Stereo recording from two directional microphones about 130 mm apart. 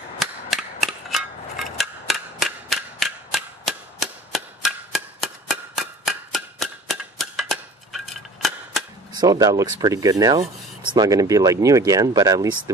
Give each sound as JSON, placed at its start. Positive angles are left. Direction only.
{"t": 0.2, "sound": "cap gun", "side_deg": 0}
{"t": 1.1, "sound": "a sound", "side_deg": 0}
{"t": 9.2, "sound": "speech", "side_deg": -30}